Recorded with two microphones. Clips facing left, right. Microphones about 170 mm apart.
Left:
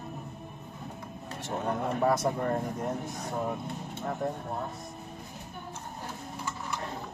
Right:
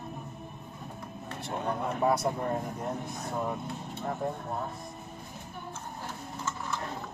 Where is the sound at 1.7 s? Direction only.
55° left (ahead or behind).